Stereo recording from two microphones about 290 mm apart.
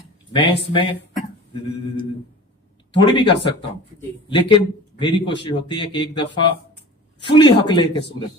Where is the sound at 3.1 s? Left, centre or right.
Centre.